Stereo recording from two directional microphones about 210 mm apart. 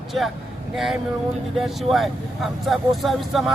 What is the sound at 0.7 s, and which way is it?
Vehicle, centre (ahead or behind).